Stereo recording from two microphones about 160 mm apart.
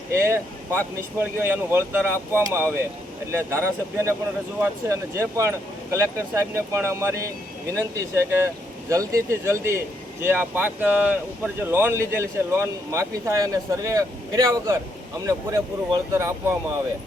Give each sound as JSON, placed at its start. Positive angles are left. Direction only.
{"t": 0.1, "sound": "speech", "side_deg": -15}